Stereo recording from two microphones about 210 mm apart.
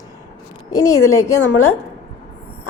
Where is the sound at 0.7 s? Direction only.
15° left (ahead or behind).